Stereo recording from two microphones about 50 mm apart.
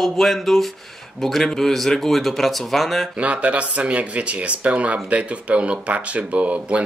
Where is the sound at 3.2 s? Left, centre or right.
Right.